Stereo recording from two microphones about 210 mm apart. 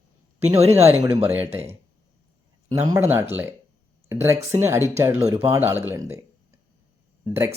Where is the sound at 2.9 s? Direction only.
10° right (ahead or behind).